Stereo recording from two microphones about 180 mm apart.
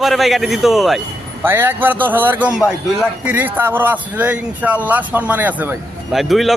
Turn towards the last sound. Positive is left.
turn(degrees=0)  # may be behind; listen again after turning